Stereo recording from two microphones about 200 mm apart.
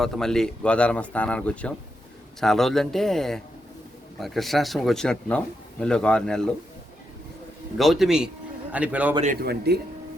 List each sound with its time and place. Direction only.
0.0 s speech: centre (ahead or behind)
7.8 s a man's voice: centre (ahead or behind)
9.2 s speech: 45° right (ahead or behind)